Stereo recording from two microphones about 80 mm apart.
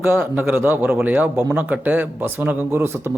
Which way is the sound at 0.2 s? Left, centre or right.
Right.